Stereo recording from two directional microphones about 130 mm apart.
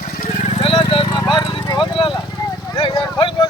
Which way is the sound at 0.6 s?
40° left (ahead or behind).